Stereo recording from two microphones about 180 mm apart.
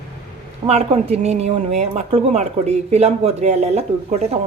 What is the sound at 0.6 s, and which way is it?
Speech, 35° right (ahead or behind).